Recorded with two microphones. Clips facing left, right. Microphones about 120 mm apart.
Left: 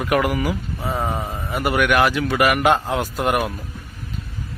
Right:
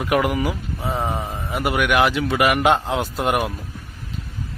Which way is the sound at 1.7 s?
15° right (ahead or behind).